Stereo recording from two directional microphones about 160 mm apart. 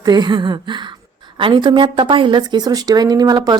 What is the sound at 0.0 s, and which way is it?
A woman's voice, 25° right (ahead or behind).